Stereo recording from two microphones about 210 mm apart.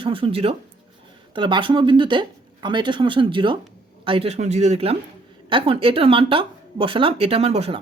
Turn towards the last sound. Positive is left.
turn(degrees=-30)  # may be behind; listen again after turning